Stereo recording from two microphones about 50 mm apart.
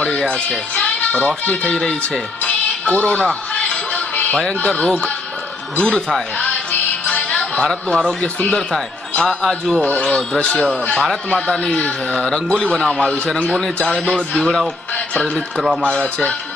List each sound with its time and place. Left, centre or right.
0.0 s speech: centre
1.7 s a man's voice: centre
2.4 s music: left
4.1 s music: left
4.6 s a man's voice: left
6.3 s music: left
7.6 s a man's voice: centre
9.8 s a man's voice: left
11.7 s speech: left
12.2 s a man's voice: centre
15.8 s speech: left